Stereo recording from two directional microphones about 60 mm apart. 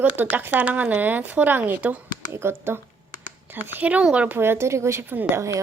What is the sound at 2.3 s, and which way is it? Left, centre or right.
Speech, right.